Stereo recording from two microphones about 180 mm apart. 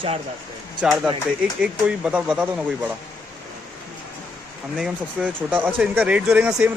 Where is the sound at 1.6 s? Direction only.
5° right (ahead or behind).